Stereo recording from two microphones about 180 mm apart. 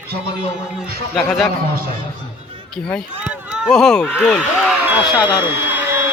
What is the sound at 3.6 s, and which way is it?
A man's voice, centre (ahead or behind).